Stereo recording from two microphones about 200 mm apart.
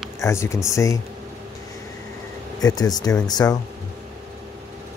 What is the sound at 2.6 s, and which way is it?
Speech, 20° left (ahead or behind).